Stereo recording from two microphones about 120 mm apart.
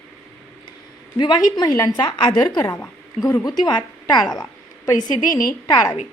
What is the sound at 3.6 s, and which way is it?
Speech, 35° left (ahead or behind).